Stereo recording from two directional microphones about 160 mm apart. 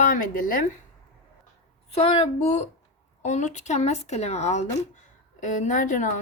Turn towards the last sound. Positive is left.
turn(degrees=55)  # may be behind; listen again after turning